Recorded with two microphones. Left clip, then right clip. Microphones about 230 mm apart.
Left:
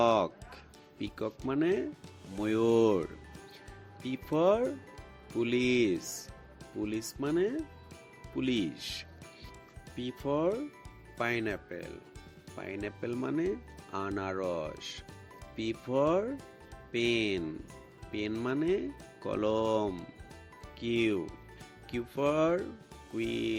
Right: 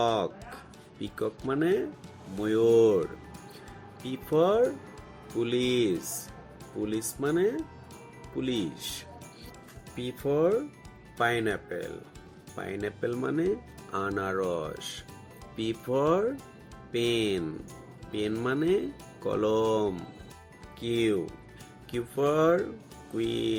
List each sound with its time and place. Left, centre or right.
0.0 s music: left
0.9 s speech: left
4.1 s speech: left
10.2 s speech: left